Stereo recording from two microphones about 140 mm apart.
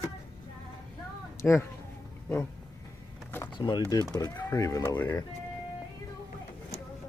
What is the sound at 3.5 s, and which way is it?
Speech, 30° left (ahead or behind).